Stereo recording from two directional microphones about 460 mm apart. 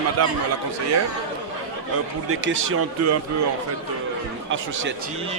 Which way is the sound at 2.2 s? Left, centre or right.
Right.